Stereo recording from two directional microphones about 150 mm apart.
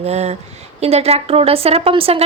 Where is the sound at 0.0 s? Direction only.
45° right (ahead or behind).